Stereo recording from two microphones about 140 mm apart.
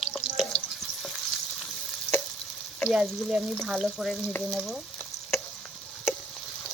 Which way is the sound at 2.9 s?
Centre (ahead or behind).